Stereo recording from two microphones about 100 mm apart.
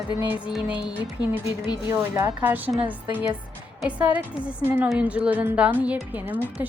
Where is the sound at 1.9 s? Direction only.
25° right (ahead or behind).